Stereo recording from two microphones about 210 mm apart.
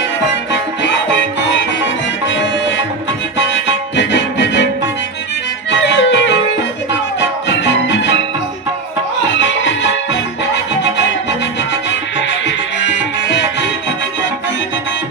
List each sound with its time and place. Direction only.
0.5 s music: 55° left (ahead or behind)
6.0 s music: 55° left (ahead or behind)
9.3 s music: 60° left (ahead or behind)
11.9 s music: 60° left (ahead or behind)